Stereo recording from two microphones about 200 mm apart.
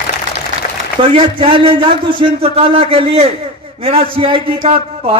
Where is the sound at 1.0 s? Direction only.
30° right (ahead or behind).